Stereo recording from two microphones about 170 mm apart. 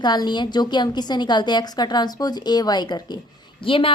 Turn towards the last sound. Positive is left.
turn(degrees=30)  # may be behind; listen again after turning